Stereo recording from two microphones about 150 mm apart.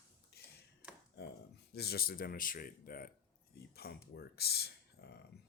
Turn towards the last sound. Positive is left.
turn(degrees=90)